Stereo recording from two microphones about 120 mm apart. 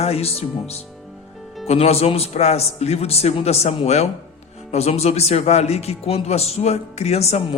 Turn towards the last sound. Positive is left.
turn(degrees=60)  # may be behind; listen again after turning